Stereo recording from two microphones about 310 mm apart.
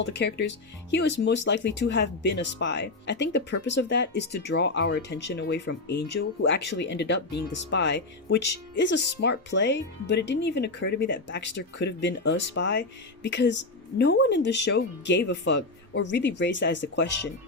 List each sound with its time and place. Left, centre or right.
0.0 s speech: left